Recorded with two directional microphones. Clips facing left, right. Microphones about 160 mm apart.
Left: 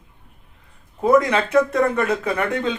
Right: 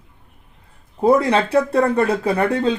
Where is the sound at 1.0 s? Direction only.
30° right (ahead or behind).